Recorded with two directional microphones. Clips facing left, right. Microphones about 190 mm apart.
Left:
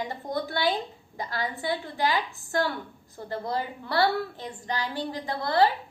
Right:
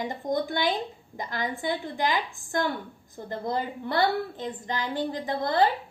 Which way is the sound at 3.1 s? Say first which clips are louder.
Right 1 dB; 20° right (ahead or behind).